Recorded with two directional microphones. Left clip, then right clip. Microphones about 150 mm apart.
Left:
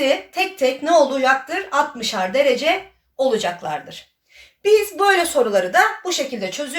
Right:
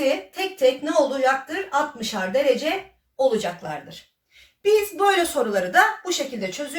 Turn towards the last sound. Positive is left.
turn(degrees=-45)  # may be behind; listen again after turning